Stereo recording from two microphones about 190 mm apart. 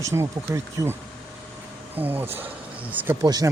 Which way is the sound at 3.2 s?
20° right (ahead or behind).